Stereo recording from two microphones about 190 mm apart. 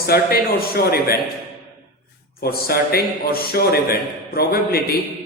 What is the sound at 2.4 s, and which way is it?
A man's voice, 55° left (ahead or behind).